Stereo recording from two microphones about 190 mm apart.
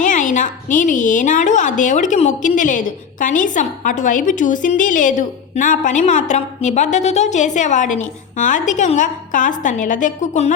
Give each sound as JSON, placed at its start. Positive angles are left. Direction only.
{"t": 0.0, "sound": "a woman's voice", "side_deg": 40}